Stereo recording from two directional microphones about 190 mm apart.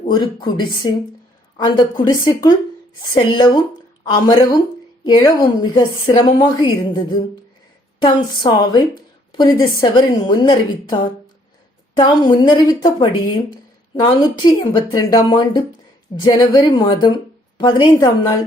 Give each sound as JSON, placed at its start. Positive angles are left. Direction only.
{"t": 0.1, "sound": "a woman's voice", "side_deg": 25}